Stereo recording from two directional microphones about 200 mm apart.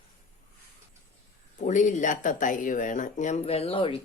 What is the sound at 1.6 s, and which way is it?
Speech, 40° left (ahead or behind).